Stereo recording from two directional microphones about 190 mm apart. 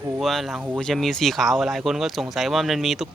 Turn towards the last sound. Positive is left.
turn(degrees=0)  # may be behind; listen again after turning